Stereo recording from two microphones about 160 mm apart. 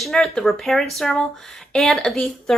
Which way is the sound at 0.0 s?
5° left (ahead or behind).